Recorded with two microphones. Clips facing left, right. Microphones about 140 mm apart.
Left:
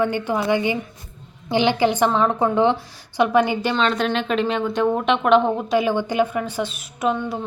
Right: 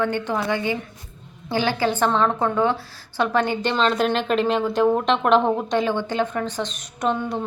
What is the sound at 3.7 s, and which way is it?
Speech, centre (ahead or behind).